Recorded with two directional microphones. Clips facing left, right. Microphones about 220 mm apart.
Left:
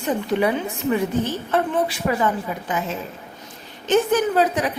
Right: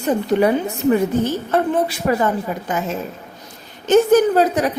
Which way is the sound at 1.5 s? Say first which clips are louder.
Right 2 dB; 40° right (ahead or behind).